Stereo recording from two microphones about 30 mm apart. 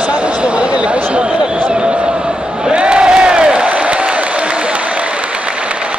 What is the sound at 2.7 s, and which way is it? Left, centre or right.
Crowd, right.